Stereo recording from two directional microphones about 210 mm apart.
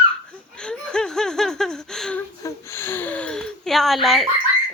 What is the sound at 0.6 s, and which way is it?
Laughter, 5° left (ahead or behind).